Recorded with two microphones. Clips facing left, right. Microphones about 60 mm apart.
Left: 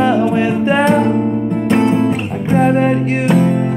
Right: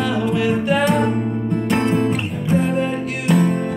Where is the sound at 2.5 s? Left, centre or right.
Left.